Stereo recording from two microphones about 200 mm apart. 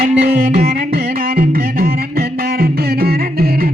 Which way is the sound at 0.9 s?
50° right (ahead or behind).